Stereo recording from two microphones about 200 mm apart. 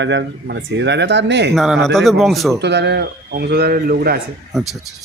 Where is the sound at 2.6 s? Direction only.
60° right (ahead or behind).